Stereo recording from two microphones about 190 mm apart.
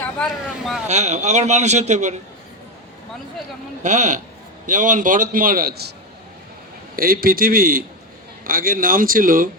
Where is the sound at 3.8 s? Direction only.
40° right (ahead or behind); by 5.9 s 55° right (ahead or behind).